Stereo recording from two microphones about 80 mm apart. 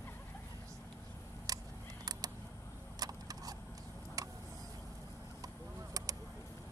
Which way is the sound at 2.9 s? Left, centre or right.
Right.